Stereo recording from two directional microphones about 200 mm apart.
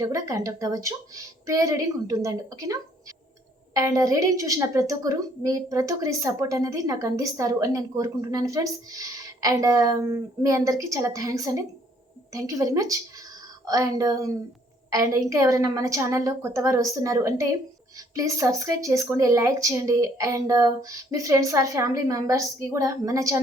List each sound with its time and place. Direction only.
0.0 s a woman's voice: 15° right (ahead or behind)